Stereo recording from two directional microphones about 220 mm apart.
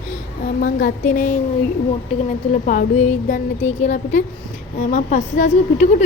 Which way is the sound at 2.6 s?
35° left (ahead or behind).